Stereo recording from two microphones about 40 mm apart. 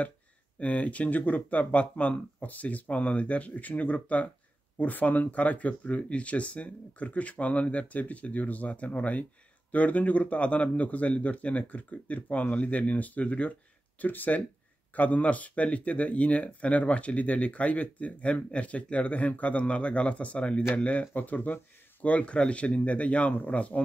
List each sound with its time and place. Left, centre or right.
0.6 s speech: left
22.0 s speech: left